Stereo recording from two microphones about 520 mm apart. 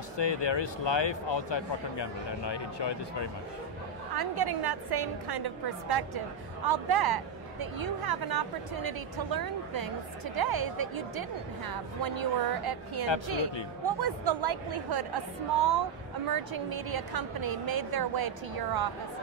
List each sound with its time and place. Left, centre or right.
0.2 s speech: left
4.1 s a woman's voice: right
12.0 s a woman's voice: right
16.9 s a woman's voice: right